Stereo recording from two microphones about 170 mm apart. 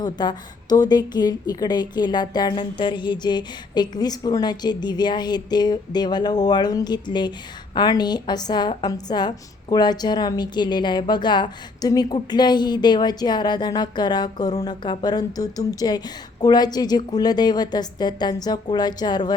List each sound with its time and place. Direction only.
0.0 s a woman's voice: 25° left (ahead or behind)